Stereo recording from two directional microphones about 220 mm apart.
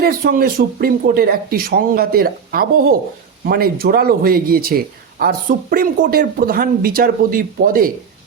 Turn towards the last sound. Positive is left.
turn(degrees=-40)  # may be behind; listen again after turning